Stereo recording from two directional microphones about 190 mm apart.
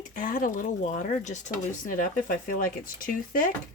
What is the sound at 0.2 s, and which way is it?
Speech, 45° left (ahead or behind).